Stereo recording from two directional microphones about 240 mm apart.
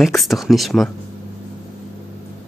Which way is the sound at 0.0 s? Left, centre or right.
Centre.